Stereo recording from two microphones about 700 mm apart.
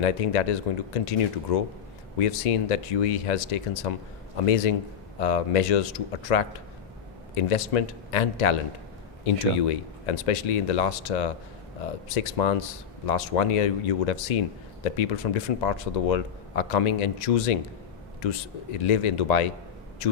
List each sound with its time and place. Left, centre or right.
0.0 s speech: left